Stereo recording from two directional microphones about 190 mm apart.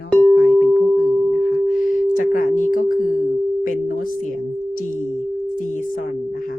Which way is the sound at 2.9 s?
45° left (ahead or behind).